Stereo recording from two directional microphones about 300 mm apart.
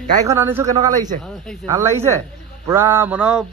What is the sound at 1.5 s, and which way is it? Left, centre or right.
Speech, centre.